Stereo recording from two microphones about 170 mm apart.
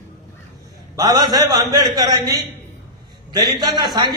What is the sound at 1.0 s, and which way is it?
A man's voice, 25° right (ahead or behind).